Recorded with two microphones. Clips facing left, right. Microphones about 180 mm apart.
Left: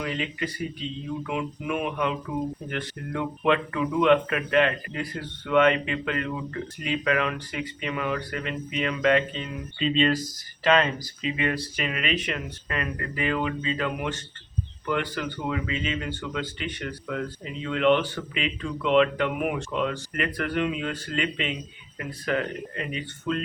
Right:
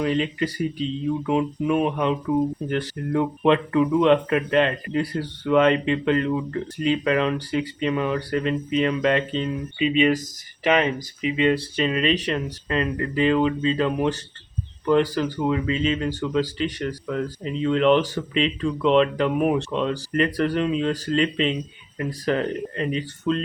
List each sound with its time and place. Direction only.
0.0 s speech: 30° right (ahead or behind)
9.7 s speech: 10° right (ahead or behind); by 23.4 s 35° right (ahead or behind)